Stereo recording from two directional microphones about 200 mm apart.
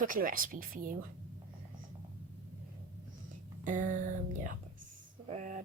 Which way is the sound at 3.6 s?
40° right (ahead or behind).